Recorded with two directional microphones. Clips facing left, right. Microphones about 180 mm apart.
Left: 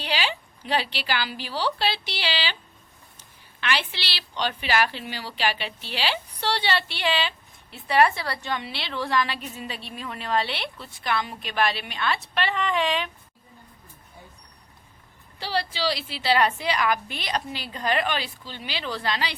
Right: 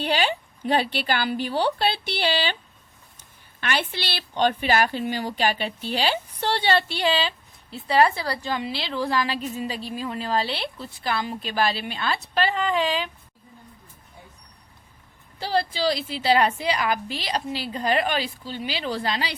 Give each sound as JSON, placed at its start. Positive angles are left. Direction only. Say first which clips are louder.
{"t": 0.0, "sound": "a woman's voice", "louder": "right 5 dB", "side_deg": -50}
{"t": 3.6, "sound": "a woman's voice", "louder": "right 2 dB", "side_deg": -50}
{"t": 15.4, "sound": "a woman's voice", "louder": "right 4 dB", "side_deg": -45}